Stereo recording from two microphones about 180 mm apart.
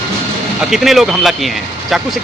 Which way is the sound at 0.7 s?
Centre (ahead or behind).